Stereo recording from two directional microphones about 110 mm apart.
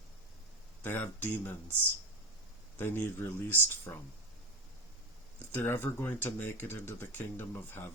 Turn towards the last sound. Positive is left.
turn(degrees=20)  # may be behind; listen again after turning